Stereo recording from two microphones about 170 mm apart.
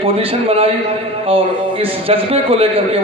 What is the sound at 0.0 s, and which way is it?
A man's voice, 35° right (ahead or behind).